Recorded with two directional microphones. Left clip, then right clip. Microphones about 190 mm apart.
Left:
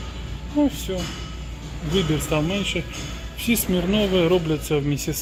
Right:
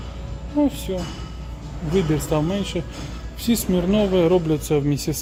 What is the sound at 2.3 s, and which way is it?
Speech, 20° right (ahead or behind).